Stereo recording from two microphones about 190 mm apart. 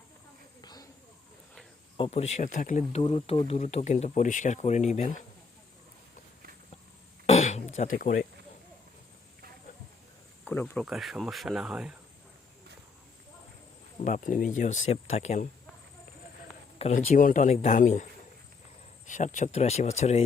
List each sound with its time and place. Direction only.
0.6 s a sound: 20° left (ahead or behind)
2.0 s speech: 35° left (ahead or behind)
3.0 s speech: 30° left (ahead or behind)
7.3 s a sound: 35° left (ahead or behind)
10.4 s speech: 10° left (ahead or behind)
10.8 s speech: centre (ahead or behind)
14.0 s speech: 45° left (ahead or behind)
16.7 s speech: 40° left (ahead or behind)
19.0 s speech: 40° left (ahead or behind)